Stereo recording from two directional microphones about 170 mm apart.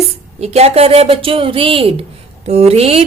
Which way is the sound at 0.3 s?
40° right (ahead or behind).